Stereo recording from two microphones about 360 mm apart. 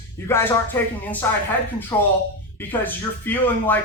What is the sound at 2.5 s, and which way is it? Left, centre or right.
Speech, centre.